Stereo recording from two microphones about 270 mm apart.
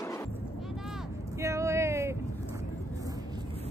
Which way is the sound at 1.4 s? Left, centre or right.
Centre.